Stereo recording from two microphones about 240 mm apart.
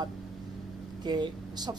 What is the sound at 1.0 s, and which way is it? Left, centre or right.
Speech, centre.